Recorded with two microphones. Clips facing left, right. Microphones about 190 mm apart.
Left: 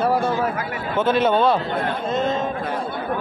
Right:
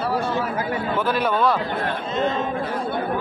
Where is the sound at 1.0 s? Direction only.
25° left (ahead or behind).